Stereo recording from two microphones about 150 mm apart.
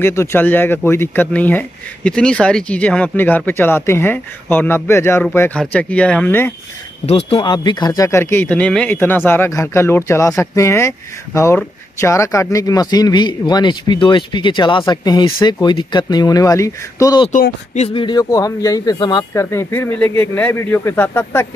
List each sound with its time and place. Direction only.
0.0 s speech: 15° left (ahead or behind)
7.1 s speech: 40° left (ahead or behind); by 17.2 s 20° left (ahead or behind)
17.3 s music: 55° left (ahead or behind)
17.8 s speech: 35° left (ahead or behind)
19.3 s speech: 15° left (ahead or behind)